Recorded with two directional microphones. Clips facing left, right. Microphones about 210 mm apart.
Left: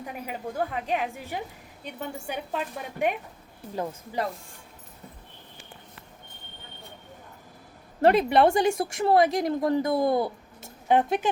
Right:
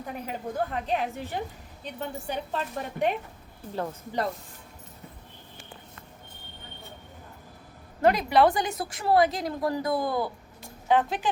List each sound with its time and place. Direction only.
0.0 s a woman's voice: 5° left (ahead or behind)
8.0 s speech: 25° left (ahead or behind)